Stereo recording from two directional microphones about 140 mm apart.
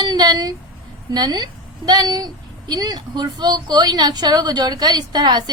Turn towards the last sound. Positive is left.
turn(degrees=-30)  # may be behind; listen again after turning